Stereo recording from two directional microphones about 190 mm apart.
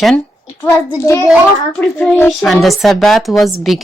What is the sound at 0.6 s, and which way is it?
Speech, 15° left (ahead or behind).